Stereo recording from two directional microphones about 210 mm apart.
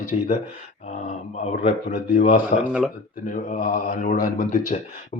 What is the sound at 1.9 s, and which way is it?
Speech, 40° left (ahead or behind).